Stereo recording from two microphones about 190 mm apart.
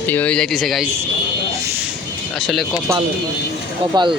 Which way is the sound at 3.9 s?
25° right (ahead or behind).